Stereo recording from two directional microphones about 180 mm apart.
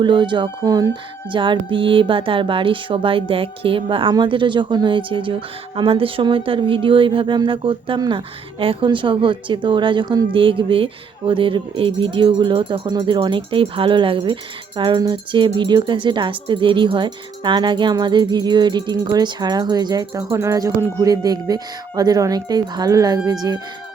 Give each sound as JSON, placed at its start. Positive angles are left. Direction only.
{"t": 0.0, "sound": "speech", "side_deg": -25}